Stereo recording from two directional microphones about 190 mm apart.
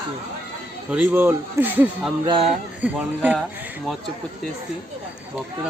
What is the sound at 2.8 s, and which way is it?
Speech, 10° right (ahead or behind).